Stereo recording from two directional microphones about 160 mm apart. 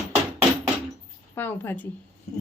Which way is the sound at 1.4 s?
10° left (ahead or behind).